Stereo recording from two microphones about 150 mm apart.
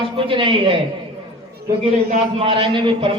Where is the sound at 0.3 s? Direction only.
35° right (ahead or behind).